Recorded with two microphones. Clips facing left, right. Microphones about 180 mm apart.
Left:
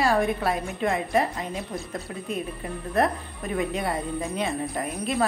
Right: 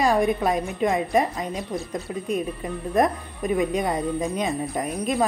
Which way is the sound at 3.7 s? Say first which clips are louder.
Right 4 dB; 15° right (ahead or behind).